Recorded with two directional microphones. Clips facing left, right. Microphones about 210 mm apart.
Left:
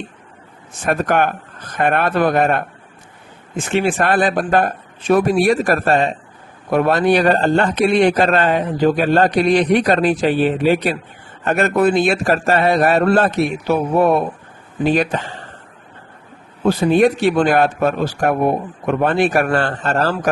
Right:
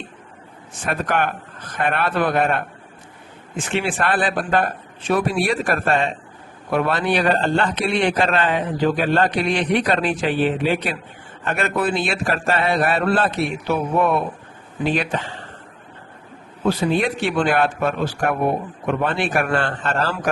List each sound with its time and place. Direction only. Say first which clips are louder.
0.9 s a man's voice: left 5 dB; 45° left (ahead or behind)
3.7 s a man's voice: left 5 dB; 40° left (ahead or behind)
16.6 s a man's voice: left 6 dB; 45° left (ahead or behind)